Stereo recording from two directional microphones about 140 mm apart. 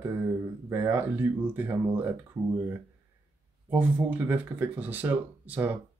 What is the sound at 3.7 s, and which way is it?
Speech, 10° right (ahead or behind).